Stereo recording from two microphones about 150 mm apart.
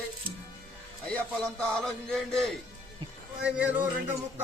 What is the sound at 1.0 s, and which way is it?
A man's voice, 5° left (ahead or behind).